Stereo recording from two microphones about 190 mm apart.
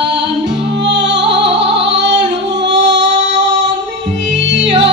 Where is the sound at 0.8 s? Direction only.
65° right (ahead or behind).